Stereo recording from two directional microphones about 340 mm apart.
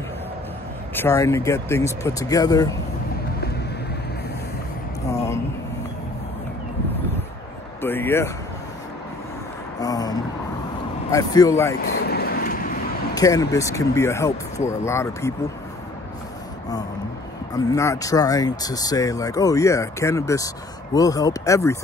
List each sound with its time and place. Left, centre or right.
0.9 s speech: centre
5.0 s a sound: centre
7.8 s speech: centre
9.8 s speech: centre
11.8 s vehicle: left
13.1 s speech: centre
17.6 s speech: centre